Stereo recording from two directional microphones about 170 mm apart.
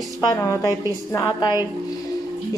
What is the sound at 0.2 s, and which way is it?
A woman's voice, 20° left (ahead or behind).